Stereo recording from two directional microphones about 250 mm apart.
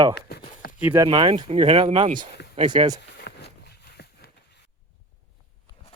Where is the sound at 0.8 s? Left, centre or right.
Centre.